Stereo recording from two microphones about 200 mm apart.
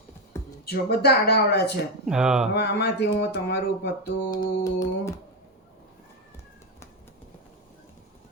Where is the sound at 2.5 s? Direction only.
55° left (ahead or behind).